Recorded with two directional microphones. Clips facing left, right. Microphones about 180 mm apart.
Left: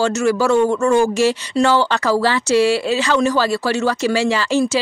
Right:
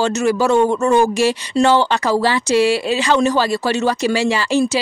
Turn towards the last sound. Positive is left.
turn(degrees=-15)  # may be behind; listen again after turning